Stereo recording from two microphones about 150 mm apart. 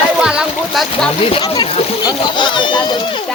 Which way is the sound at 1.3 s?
30° left (ahead or behind).